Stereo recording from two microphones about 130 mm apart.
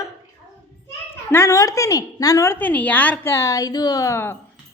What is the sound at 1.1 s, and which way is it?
A woman's voice, 20° left (ahead or behind).